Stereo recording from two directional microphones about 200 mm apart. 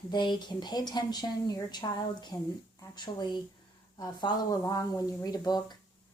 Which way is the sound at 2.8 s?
20° left (ahead or behind).